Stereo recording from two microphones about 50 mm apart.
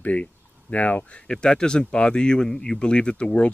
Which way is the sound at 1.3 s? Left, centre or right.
Centre.